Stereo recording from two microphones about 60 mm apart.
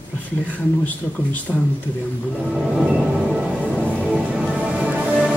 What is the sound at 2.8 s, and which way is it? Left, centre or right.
Music, centre.